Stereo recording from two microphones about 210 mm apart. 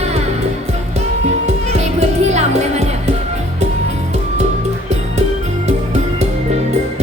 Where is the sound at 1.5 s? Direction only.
30° right (ahead or behind).